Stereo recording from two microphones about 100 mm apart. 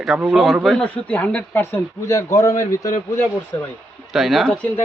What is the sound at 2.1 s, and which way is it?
A man's voice, 35° left (ahead or behind).